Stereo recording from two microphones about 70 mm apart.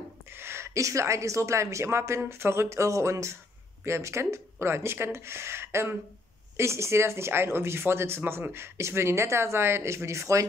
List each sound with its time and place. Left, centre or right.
0.4 s speech: right